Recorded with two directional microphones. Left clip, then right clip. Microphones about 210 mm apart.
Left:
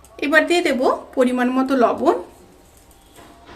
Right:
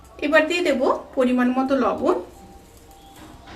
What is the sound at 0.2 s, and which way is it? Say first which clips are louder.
A woman's voice: left 2 dB; 55° left (ahead or behind).